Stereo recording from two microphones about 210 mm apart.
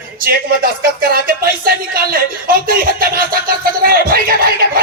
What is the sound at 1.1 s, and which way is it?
Speech, 45° right (ahead or behind).